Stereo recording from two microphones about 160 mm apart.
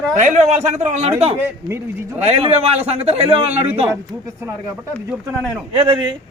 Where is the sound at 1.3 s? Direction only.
15° right (ahead or behind).